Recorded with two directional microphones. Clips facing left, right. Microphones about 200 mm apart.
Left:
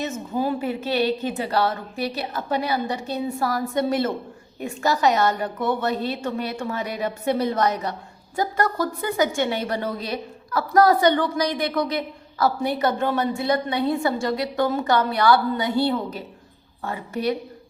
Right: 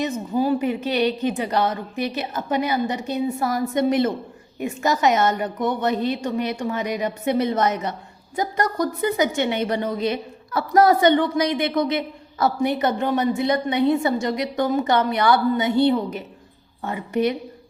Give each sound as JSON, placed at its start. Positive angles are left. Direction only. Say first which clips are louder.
{"t": 0.0, "sound": "a woman's voice", "louder": "right 3 dB", "side_deg": -15}